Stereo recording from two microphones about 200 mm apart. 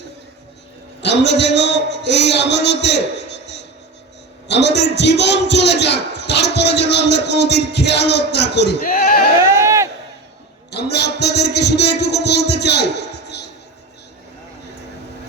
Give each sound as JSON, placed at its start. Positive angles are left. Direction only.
{"t": 1.0, "sound": "a man's voice", "side_deg": 60}
{"t": 9.4, "sound": "a sound", "side_deg": -15}
{"t": 10.7, "sound": "a man's voice", "side_deg": 55}
{"t": 13.2, "sound": "music", "side_deg": 55}